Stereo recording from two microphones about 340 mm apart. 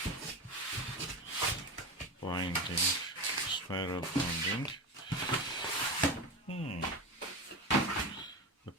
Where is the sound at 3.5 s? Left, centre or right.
Centre.